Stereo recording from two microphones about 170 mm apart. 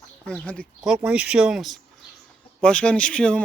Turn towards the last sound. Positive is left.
turn(degrees=5)  # may be behind; listen again after turning